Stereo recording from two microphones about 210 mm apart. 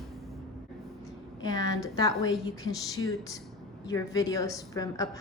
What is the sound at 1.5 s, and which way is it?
A woman's voice, 15° left (ahead or behind).